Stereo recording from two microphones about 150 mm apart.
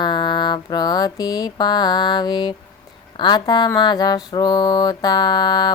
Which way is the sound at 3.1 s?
30° left (ahead or behind).